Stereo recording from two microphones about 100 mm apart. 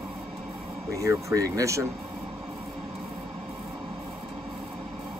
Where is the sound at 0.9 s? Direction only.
30° right (ahead or behind).